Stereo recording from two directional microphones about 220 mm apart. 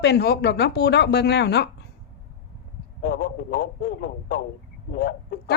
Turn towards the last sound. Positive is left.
turn(degrees=45)  # may be behind; listen again after turning